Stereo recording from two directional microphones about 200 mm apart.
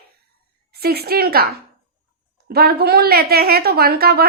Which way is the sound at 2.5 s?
50° right (ahead or behind).